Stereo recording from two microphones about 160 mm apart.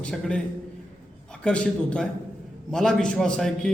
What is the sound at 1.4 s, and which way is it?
A man's voice, 5° left (ahead or behind).